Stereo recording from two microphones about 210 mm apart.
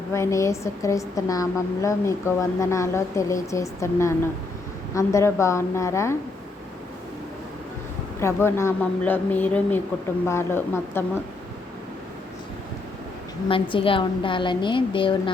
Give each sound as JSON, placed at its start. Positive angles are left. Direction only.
{"t": 0.1, "sound": "a woman's voice", "side_deg": 15}
{"t": 8.2, "sound": "a woman's voice", "side_deg": 10}
{"t": 13.5, "sound": "a woman's voice", "side_deg": 25}